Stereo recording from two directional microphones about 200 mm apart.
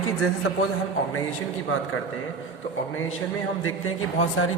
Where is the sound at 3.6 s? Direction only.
90° left.